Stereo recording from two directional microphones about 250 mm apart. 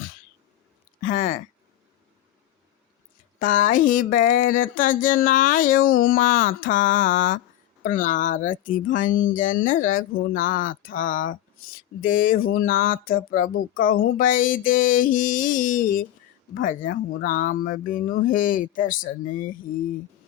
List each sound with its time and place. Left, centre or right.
1.0 s speech: left
3.3 s speech: left